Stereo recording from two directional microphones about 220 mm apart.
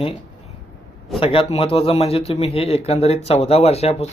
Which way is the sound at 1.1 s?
25° left (ahead or behind).